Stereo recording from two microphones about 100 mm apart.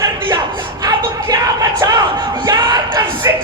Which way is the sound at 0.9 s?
35° right (ahead or behind).